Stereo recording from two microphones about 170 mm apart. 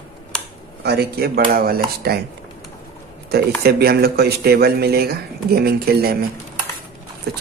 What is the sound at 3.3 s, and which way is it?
Speech, 70° right (ahead or behind).